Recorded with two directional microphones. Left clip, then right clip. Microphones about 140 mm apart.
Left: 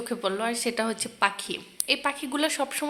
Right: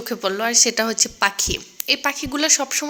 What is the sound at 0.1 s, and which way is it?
A woman's voice, 20° right (ahead or behind).